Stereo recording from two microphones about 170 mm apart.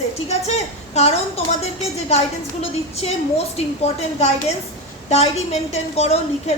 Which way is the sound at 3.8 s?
40° left (ahead or behind).